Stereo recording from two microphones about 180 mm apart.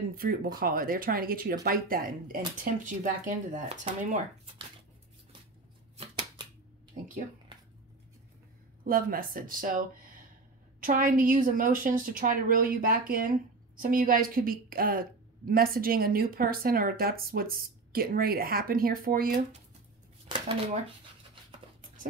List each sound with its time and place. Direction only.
0.2 s a woman's voice: 55° right (ahead or behind)
5.9 s shuffling cards: 35° right (ahead or behind)
8.8 s a woman's voice: 50° right (ahead or behind)
20.2 s speech: 30° right (ahead or behind)
21.8 s a sound: 50° right (ahead or behind)